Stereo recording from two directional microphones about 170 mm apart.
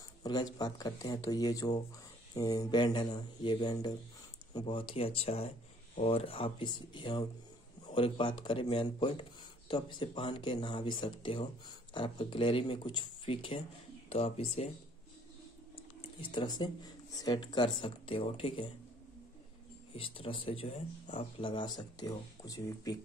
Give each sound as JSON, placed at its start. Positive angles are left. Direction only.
{"t": 0.2, "sound": "speech", "side_deg": 25}
{"t": 16.2, "sound": "speech", "side_deg": 25}
{"t": 20.0, "sound": "speech", "side_deg": 30}